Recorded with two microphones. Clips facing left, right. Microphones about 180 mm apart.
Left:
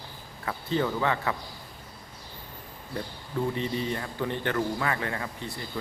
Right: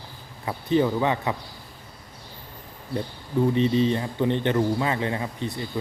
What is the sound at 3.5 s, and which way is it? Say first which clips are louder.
A man's voice: right 9 dB; 20° right (ahead or behind).